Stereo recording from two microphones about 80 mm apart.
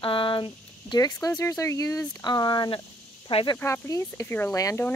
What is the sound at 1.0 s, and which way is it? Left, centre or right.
Speech, left.